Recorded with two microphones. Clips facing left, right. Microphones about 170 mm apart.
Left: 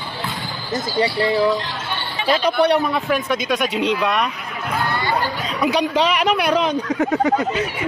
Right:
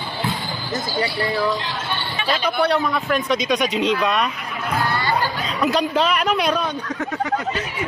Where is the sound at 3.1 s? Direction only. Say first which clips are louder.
Even; 10° left (ahead or behind).